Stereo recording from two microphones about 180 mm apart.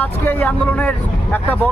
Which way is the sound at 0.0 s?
10° left (ahead or behind).